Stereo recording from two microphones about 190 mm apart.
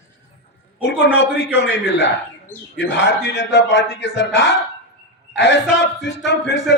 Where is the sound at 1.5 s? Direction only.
65° left (ahead or behind).